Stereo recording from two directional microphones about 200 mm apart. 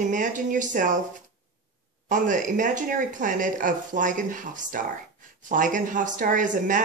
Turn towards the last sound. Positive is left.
turn(degrees=-40)  # may be behind; listen again after turning